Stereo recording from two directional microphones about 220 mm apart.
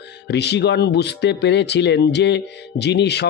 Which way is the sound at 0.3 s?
50° left (ahead or behind).